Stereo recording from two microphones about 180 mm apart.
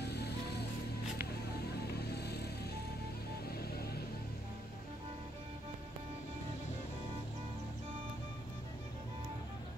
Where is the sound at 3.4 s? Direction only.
60° left (ahead or behind).